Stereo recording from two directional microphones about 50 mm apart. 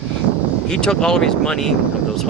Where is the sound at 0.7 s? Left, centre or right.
Centre.